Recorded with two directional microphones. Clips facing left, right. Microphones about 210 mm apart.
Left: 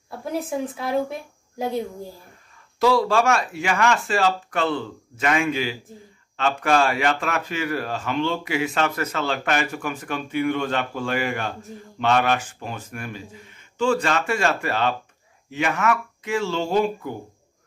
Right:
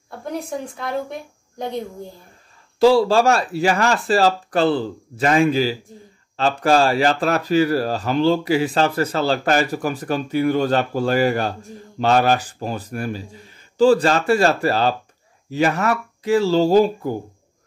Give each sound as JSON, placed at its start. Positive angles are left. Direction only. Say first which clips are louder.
{"t": 0.2, "sound": "speech", "louder": "left 1 dB", "side_deg": 5}
{"t": 2.8, "sound": "speech", "louder": "right 5 dB", "side_deg": -30}